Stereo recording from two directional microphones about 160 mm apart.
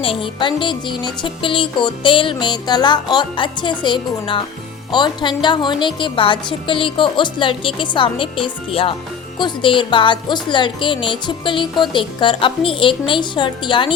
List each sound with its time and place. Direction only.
0.0 s speech: 35° left (ahead or behind)